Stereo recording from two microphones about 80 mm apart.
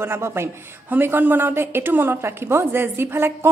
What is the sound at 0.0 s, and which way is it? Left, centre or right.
A woman's voice, right.